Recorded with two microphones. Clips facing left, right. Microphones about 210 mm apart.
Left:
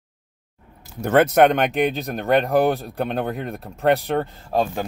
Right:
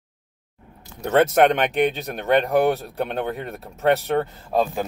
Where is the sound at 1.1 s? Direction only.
Centre (ahead or behind).